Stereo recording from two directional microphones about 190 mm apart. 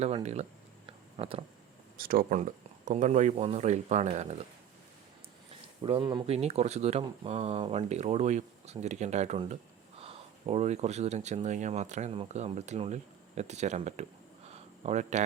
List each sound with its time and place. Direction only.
0.0 s speech: 35° right (ahead or behind)
0.9 s a sound: 30° right (ahead or behind)
2.0 s speech: 50° right (ahead or behind)
5.8 s speech: 25° right (ahead or behind)